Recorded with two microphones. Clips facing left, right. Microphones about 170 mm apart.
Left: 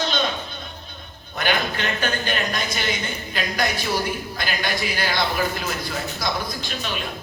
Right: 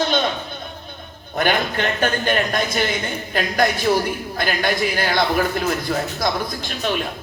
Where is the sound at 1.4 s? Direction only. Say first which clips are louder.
Right 4 dB; 50° right (ahead or behind).